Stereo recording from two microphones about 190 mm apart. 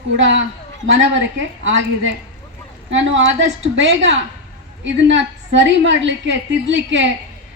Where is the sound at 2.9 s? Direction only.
75° right (ahead or behind).